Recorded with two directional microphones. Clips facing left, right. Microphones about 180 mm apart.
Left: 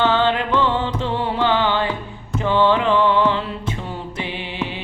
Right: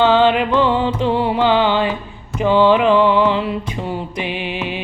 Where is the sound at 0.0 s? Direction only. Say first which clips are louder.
Right 5 dB; 15° right (ahead or behind).